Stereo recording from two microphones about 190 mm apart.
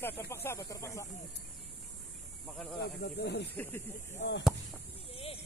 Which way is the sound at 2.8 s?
65° left (ahead or behind).